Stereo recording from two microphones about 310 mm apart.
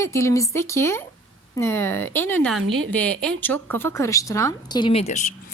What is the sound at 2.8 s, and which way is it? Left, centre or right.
Speech, centre.